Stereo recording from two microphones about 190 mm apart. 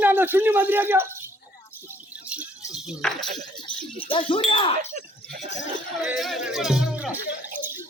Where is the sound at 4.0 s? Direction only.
30° left (ahead or behind).